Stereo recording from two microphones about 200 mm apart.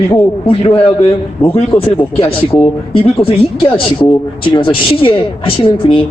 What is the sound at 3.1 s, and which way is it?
A woman's voice, 30° left (ahead or behind).